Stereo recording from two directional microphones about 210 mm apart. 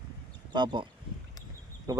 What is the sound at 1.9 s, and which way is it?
Speech, 15° right (ahead or behind).